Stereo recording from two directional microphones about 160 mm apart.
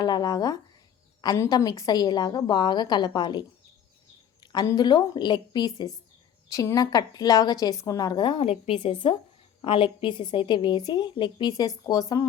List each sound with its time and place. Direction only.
0.0 s a woman's voice: 25° left (ahead or behind)
4.5 s a woman's voice: 25° left (ahead or behind)